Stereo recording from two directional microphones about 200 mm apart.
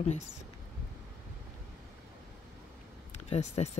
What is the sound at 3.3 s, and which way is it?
Speech, 35° left (ahead or behind).